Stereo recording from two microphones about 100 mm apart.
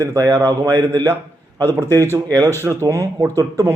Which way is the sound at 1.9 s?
35° right (ahead or behind).